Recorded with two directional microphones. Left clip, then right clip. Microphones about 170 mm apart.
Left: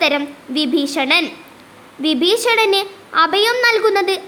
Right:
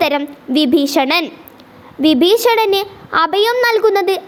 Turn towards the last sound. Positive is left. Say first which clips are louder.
# right 2 dB
turn(degrees=-45)  # may be behind; listen again after turning